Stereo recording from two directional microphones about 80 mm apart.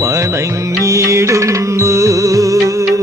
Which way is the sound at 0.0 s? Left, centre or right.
Right.